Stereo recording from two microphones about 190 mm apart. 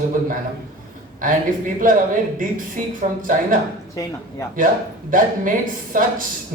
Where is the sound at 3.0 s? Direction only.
45° right (ahead or behind).